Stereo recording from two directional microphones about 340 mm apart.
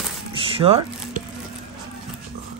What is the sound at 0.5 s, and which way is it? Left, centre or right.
Squish, centre.